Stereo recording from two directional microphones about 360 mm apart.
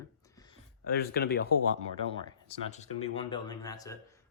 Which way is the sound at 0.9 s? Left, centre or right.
Left.